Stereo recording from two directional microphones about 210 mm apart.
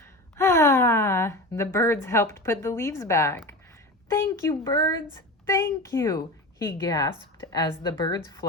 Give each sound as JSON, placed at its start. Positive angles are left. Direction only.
{"t": 0.0, "sound": "gasp", "side_deg": 10}
{"t": 4.1, "sound": "a woman's voice", "side_deg": 15}